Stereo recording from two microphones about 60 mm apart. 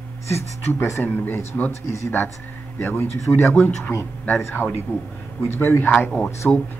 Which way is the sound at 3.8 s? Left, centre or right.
Left.